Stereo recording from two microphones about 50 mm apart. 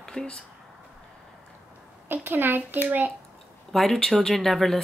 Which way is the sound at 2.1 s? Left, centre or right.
Right.